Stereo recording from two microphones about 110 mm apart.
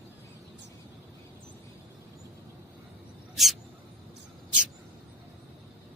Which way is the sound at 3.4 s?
Centre (ahead or behind).